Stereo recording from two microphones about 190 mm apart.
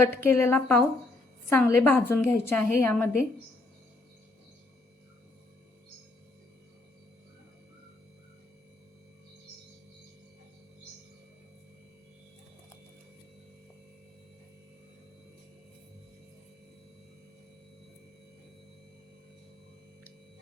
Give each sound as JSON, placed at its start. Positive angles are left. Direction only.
{"t": 0.0, "sound": "a woman's voice", "side_deg": 10}